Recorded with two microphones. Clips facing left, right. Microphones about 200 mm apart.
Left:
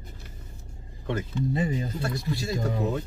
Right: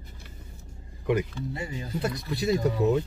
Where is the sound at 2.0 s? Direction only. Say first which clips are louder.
Right 3 dB; 20° right (ahead or behind).